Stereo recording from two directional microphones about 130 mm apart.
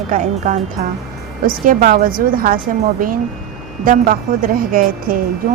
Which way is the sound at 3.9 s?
90° right.